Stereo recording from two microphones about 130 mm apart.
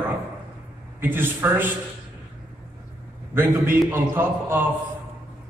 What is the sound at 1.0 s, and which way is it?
Speech, 15° right (ahead or behind).